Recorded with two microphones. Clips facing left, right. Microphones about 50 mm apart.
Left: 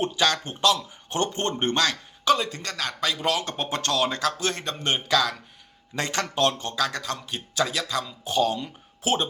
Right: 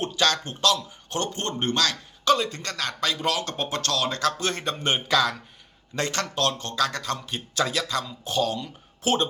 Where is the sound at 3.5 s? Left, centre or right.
Left; by 5.4 s centre.